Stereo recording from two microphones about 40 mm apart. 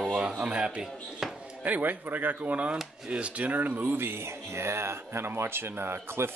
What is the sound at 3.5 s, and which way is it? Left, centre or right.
Speech, right.